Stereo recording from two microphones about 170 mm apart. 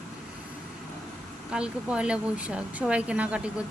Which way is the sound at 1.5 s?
5° right (ahead or behind).